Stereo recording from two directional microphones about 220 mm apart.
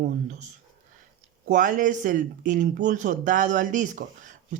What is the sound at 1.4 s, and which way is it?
Speech, 35° right (ahead or behind).